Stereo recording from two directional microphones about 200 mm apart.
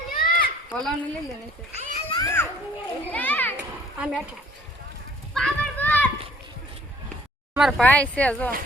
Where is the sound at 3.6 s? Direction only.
5° right (ahead or behind).